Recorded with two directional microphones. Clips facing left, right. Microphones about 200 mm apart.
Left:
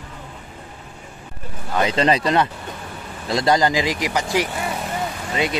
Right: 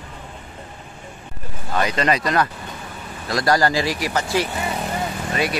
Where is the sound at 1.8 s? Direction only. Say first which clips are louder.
Left 2 dB; 25° left (ahead or behind).